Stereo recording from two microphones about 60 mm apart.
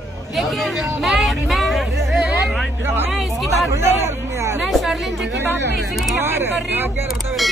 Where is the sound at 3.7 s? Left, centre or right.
Right.